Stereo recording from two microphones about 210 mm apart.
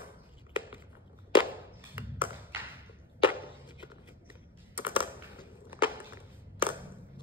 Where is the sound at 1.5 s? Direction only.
10° right (ahead or behind).